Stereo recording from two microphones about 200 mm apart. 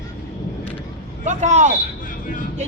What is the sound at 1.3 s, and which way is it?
Speech, 35° right (ahead or behind).